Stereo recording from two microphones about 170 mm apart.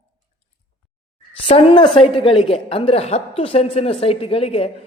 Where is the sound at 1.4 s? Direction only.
35° left (ahead or behind).